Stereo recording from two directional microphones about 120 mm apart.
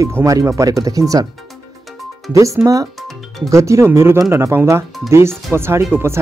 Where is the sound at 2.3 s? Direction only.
25° right (ahead or behind).